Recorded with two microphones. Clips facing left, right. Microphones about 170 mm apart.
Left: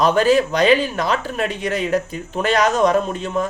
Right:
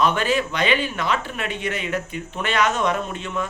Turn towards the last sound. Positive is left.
turn(degrees=40)  # may be behind; listen again after turning